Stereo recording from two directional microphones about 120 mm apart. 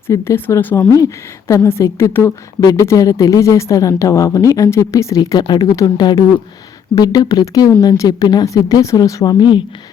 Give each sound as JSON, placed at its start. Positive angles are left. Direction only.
{"t": 0.1, "sound": "a woman's voice", "side_deg": 20}